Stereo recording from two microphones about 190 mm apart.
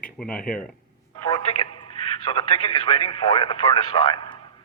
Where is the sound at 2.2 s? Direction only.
25° left (ahead or behind).